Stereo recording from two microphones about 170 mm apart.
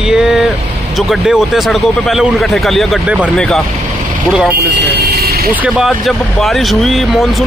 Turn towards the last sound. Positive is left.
turn(degrees=0)  # may be behind; listen again after turning